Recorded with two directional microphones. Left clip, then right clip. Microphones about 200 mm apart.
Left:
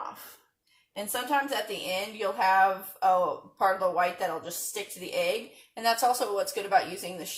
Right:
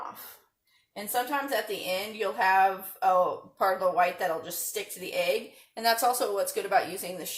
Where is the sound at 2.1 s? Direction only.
10° right (ahead or behind).